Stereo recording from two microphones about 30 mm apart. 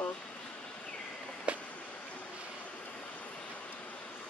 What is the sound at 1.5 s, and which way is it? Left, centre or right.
Vehicle, right.